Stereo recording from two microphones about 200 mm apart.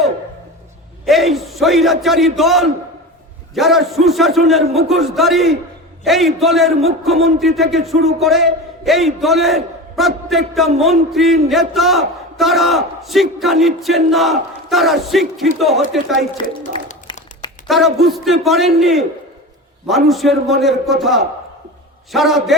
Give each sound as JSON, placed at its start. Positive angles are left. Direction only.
{"t": 1.0, "sound": "a man's voice", "side_deg": 0}
{"t": 17.1, "sound": "crumpling", "side_deg": 20}
{"t": 17.7, "sound": "a man's voice", "side_deg": 0}